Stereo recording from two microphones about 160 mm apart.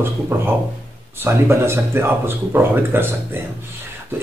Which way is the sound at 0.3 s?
10° right (ahead or behind).